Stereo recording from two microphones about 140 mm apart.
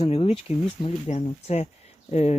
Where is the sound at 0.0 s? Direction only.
45° left (ahead or behind).